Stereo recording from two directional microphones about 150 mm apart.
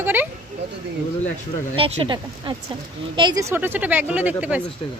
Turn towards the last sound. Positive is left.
turn(degrees=-10)  # may be behind; listen again after turning